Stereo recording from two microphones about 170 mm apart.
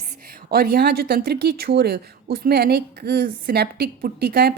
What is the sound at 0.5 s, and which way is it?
Speech, 65° right (ahead or behind).